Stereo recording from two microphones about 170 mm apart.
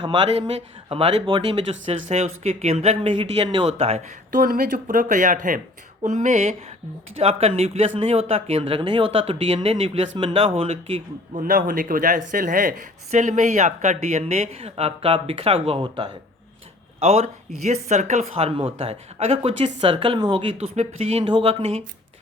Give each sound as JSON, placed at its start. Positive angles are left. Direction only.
{"t": 0.0, "sound": "speech", "side_deg": -30}
{"t": 4.3, "sound": "speech", "side_deg": -55}
{"t": 11.4, "sound": "speech", "side_deg": -55}